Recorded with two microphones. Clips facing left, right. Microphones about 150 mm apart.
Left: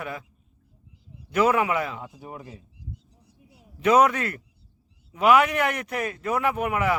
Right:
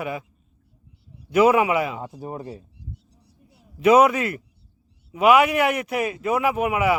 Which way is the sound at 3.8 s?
10° right (ahead or behind).